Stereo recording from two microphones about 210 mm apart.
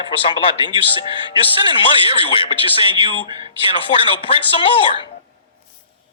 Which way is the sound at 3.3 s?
20° right (ahead or behind).